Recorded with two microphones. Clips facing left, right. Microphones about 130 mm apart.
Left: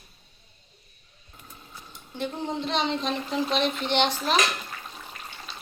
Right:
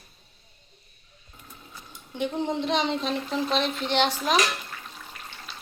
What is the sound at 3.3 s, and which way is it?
Speech, centre (ahead or behind).